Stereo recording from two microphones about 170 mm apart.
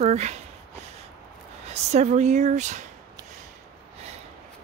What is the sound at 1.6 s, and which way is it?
Speech, 40° right (ahead or behind).